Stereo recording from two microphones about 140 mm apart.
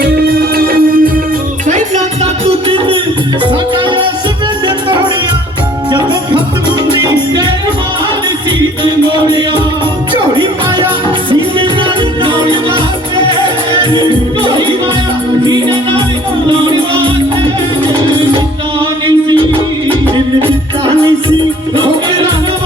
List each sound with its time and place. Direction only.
0.0 s music: 90° right
2.2 s music: 40° right (ahead or behind)
7.0 s music: 30° right (ahead or behind)
8.8 s music: 35° right (ahead or behind)
11.3 s music: 35° right (ahead or behind)
13.9 s music: 30° right (ahead or behind)
19.0 s music: 35° right (ahead or behind)